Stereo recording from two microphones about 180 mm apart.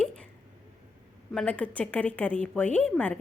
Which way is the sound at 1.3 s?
5° left (ahead or behind).